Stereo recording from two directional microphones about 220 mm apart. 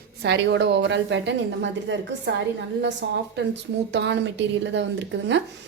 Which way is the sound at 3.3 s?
55° right (ahead or behind).